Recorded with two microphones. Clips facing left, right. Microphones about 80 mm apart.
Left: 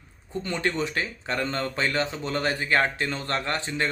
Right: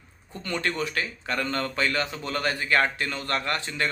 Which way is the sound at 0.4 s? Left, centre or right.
Left.